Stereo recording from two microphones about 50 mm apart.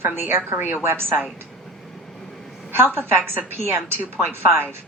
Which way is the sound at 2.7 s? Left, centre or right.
Right.